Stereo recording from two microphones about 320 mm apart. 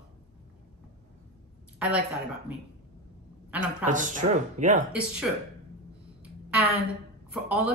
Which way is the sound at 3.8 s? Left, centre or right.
Right.